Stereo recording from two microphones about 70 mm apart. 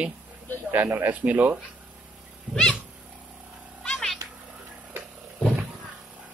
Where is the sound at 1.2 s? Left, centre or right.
Right.